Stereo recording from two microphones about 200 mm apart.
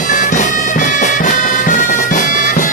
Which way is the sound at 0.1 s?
35° left (ahead or behind).